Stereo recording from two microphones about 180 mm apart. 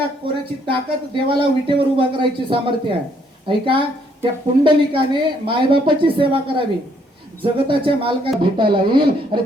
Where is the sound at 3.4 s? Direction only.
30° right (ahead or behind).